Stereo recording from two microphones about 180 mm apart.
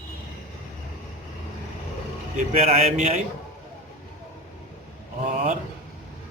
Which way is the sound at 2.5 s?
35° right (ahead or behind).